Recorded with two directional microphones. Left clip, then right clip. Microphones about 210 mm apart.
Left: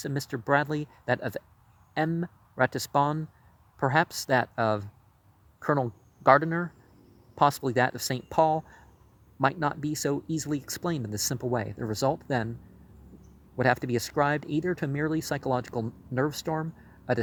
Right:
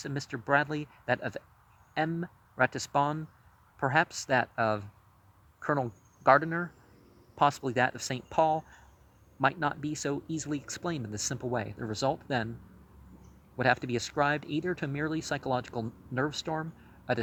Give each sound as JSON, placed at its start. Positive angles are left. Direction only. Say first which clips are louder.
{"t": 0.0, "sound": "speech", "louder": "left 4 dB", "side_deg": 35}
{"t": 13.6, "sound": "speech", "louder": "left 2 dB", "side_deg": 35}